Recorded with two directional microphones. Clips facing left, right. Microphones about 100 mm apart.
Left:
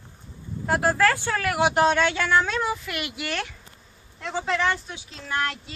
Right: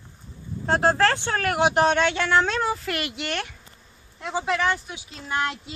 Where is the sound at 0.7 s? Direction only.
25° right (ahead or behind).